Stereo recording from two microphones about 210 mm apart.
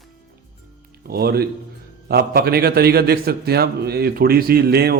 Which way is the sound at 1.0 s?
45° right (ahead or behind).